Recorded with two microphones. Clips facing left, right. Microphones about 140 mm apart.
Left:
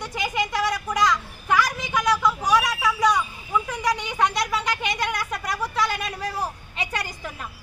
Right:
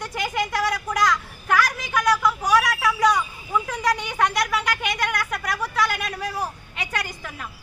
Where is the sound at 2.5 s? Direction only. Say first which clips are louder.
Right 1 dB; 20° left (ahead or behind).